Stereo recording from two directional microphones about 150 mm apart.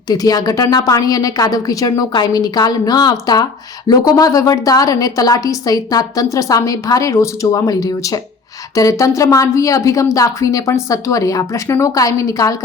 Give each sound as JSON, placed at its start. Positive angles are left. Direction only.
{"t": 0.1, "sound": "a woman's voice", "side_deg": 25}